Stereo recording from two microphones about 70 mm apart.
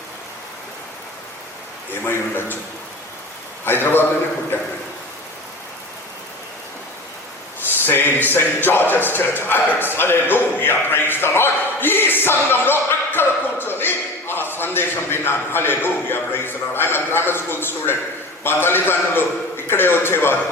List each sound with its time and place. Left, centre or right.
2.0 s speech: left
3.7 s speech: left
7.9 s speech: left